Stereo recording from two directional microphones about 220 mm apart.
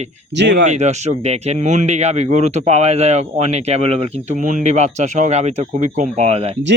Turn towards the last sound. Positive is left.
turn(degrees=-30)  # may be behind; listen again after turning